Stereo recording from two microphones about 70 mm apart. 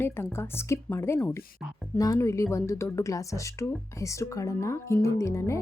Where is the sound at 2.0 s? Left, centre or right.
Left.